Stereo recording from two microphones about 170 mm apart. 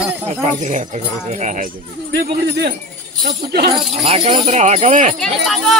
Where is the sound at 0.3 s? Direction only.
45° right (ahead or behind).